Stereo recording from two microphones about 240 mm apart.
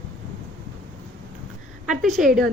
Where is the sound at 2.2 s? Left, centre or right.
Centre.